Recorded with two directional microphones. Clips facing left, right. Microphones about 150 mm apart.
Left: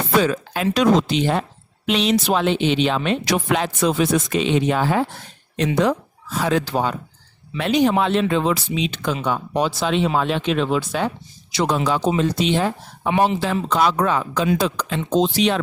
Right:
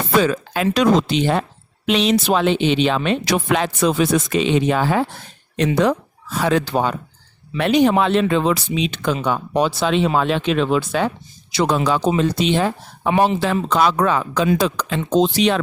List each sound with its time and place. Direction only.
0.2 s speech: 90° right
5.5 s speech: 65° right (ahead or behind)